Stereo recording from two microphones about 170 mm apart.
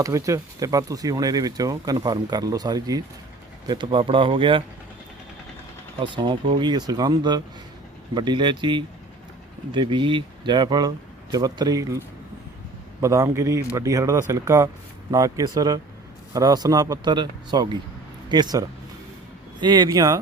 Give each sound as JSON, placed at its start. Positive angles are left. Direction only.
{"t": 0.0, "sound": "speech", "side_deg": -20}
{"t": 6.0, "sound": "speech", "side_deg": -25}